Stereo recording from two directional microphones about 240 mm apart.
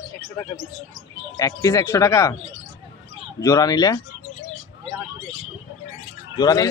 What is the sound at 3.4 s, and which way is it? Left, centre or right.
Speech, centre.